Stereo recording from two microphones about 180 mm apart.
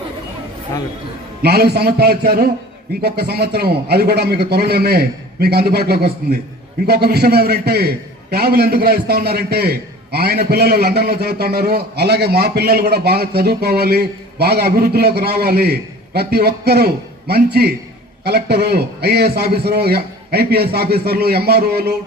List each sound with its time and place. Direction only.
1.4 s a man's voice: 60° right (ahead or behind)